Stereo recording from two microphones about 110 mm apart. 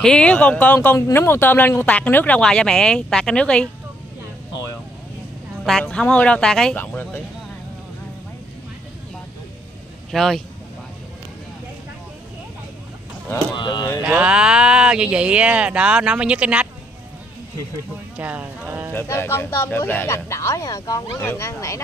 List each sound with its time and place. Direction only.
0.0 s speech: 10° left (ahead or behind)
0.9 s speech: 25° left (ahead or behind)
5.6 s speech: 5° left (ahead or behind)
10.1 s speech: 5° left (ahead or behind)
13.6 s speech: 45° left (ahead or behind)
14.0 s speech: 10° right (ahead or behind)
18.1 s a sound: 15° right (ahead or behind)
18.9 s speech: 20° left (ahead or behind)